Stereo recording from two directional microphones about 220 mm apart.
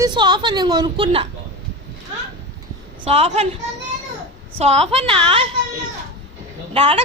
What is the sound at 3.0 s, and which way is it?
Speech, 25° right (ahead or behind).